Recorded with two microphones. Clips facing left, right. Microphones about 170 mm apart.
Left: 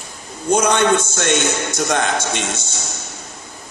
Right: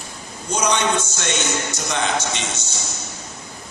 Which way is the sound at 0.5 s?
55° left (ahead or behind).